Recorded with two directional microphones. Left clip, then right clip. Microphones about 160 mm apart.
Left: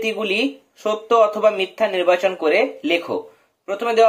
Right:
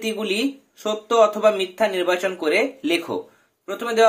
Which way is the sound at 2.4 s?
20° right (ahead or behind).